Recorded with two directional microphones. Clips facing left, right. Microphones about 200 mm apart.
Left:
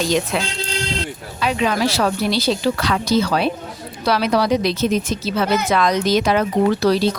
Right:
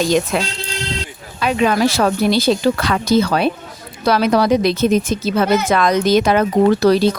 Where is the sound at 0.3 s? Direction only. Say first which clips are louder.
Right 2 dB; 50° right (ahead or behind).